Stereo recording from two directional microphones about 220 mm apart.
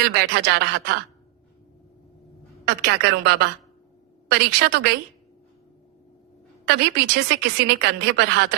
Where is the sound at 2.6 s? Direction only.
50° right (ahead or behind).